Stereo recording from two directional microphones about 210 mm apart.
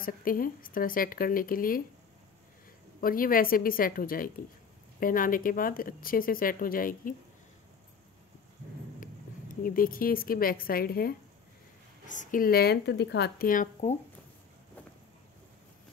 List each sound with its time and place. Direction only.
0.0 s speech: 40° left (ahead or behind)
3.0 s speech: 40° left (ahead or behind)
9.0 s a woman's voice: 40° left (ahead or behind)
12.2 s speech: 40° left (ahead or behind)